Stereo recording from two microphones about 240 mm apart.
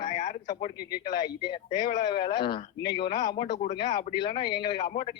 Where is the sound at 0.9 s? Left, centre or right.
Centre.